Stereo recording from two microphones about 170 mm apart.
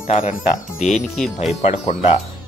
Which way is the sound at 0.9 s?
Centre (ahead or behind).